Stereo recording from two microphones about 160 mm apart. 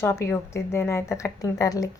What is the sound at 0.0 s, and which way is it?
A woman's voice, 15° left (ahead or behind).